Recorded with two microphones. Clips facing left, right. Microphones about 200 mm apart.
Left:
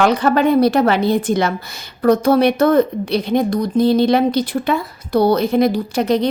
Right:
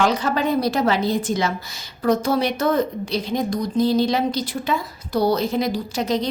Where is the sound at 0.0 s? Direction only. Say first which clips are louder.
Left 6 dB; 60° left (ahead or behind).